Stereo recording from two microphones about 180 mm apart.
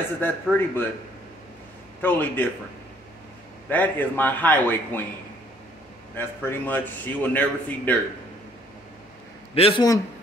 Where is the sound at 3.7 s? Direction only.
10° left (ahead or behind).